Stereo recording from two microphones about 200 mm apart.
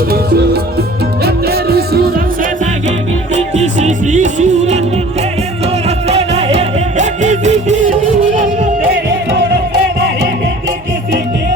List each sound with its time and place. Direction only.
0.1 s music: 50° right (ahead or behind)
3.3 s music: 35° right (ahead or behind)
9.0 s music: 60° right (ahead or behind)